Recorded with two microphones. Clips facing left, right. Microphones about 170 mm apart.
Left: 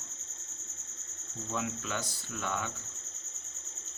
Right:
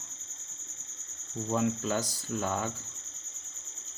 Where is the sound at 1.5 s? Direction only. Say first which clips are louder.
Right 7 dB; 35° right (ahead or behind).